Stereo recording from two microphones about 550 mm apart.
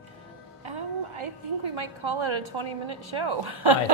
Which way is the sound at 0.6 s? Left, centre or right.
Right.